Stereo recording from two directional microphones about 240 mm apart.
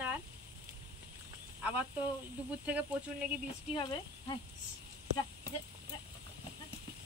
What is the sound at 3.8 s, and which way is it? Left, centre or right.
Speech, centre.